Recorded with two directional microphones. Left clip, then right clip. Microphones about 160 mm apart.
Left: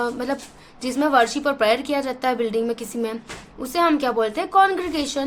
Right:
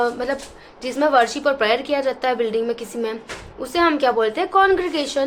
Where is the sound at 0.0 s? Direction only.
35° left (ahead or behind).